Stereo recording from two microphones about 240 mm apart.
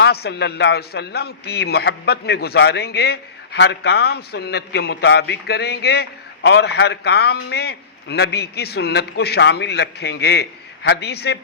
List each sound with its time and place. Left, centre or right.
0.0 s a man's voice: left